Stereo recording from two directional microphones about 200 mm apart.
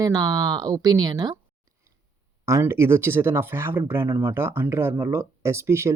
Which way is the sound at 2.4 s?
15° right (ahead or behind).